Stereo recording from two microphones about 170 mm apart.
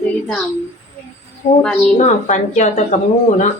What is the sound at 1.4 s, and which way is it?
Speech, 25° left (ahead or behind).